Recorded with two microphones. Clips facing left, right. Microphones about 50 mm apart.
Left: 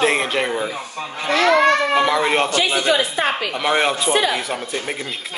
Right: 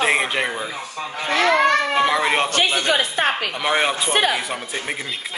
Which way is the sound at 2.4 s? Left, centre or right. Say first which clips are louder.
Even; right.